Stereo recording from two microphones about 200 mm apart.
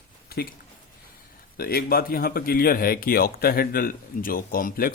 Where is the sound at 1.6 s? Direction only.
50° left (ahead or behind).